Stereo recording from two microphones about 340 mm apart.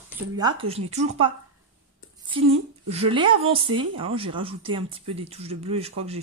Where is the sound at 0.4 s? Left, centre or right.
Centre.